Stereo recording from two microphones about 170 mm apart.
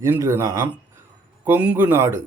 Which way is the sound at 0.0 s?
15° right (ahead or behind).